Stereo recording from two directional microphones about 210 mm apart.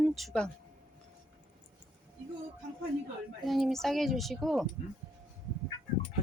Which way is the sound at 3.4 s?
Centre (ahead or behind).